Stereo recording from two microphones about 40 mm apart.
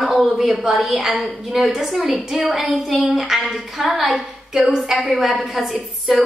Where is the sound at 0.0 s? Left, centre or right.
Centre.